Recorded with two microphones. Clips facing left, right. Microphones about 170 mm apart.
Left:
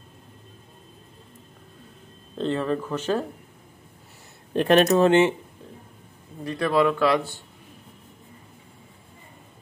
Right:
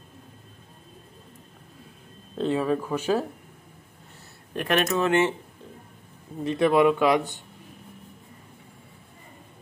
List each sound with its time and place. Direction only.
2.3 s speech: 5° right (ahead or behind)
4.6 s speech: 30° left (ahead or behind)
6.4 s speech: 20° right (ahead or behind)